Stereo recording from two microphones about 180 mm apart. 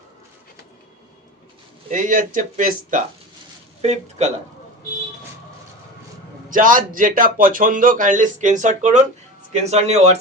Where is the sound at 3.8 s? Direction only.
40° right (ahead or behind).